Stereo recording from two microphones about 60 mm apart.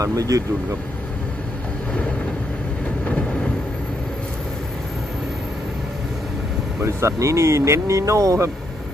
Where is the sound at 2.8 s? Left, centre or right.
Left.